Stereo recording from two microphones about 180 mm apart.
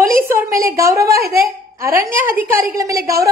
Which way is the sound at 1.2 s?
55° right (ahead or behind).